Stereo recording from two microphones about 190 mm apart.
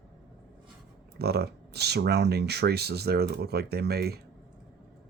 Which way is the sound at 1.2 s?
55° right (ahead or behind).